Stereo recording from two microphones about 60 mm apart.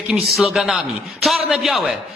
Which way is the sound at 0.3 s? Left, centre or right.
Centre.